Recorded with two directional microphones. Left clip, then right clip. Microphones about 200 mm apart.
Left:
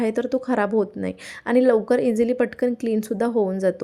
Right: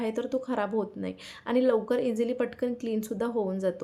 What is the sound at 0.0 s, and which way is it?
A woman's voice, 30° left (ahead or behind).